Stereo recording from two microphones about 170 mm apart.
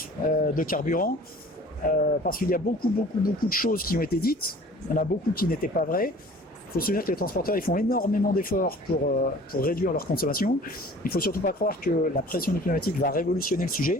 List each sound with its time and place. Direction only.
0.0 s speech: 55° left (ahead or behind)